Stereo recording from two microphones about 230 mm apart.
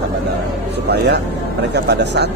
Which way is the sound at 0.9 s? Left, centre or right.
Right.